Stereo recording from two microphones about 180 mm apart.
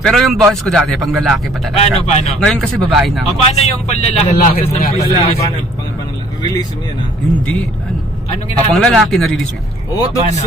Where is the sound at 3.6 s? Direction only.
35° left (ahead or behind).